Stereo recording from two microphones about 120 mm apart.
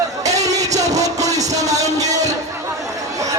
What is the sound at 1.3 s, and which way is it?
Music, 30° right (ahead or behind).